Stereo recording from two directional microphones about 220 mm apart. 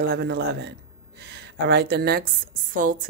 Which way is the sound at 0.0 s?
50° right (ahead or behind).